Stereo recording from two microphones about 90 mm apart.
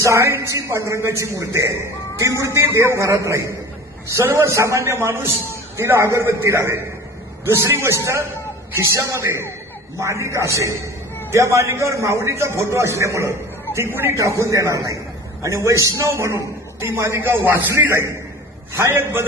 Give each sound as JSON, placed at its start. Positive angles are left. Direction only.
{"t": 0.0, "sound": "a man's voice", "side_deg": -30}